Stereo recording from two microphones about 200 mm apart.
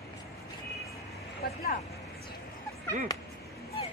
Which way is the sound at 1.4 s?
50° left (ahead or behind).